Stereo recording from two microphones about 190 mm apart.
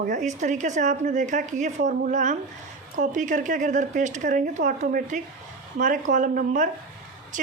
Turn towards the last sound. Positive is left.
turn(degrees=-40)  # may be behind; listen again after turning